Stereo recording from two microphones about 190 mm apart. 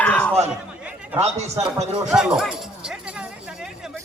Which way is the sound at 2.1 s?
5° right (ahead or behind).